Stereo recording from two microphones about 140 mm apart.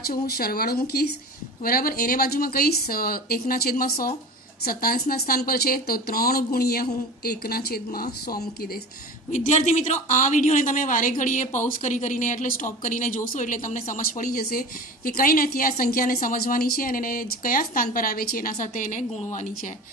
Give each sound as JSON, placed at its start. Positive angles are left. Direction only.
{"t": 0.0, "sound": "speech", "side_deg": 90}
{"t": 9.3, "sound": "a woman's voice", "side_deg": 60}